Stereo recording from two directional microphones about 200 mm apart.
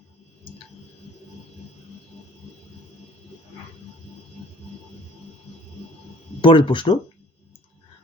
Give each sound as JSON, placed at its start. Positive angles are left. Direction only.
{"t": 6.4, "sound": "speech", "side_deg": 25}